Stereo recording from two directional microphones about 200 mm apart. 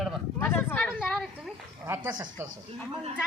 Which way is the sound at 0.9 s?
Centre (ahead or behind).